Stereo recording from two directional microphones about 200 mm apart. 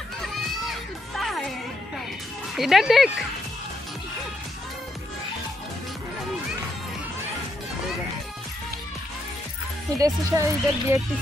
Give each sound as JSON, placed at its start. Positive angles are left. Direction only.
{"t": 0.7, "sound": "music", "side_deg": 0}
{"t": 2.5, "sound": "speech", "side_deg": 0}
{"t": 9.9, "sound": "speech", "side_deg": -15}